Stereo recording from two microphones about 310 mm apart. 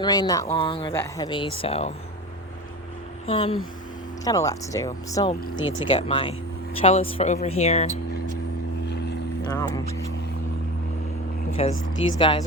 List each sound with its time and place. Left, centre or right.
0.0 s speech: centre
3.2 s speech: centre
9.4 s speech: centre
11.6 s speech: centre